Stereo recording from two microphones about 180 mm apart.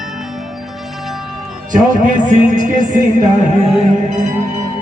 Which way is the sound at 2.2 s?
45° right (ahead or behind).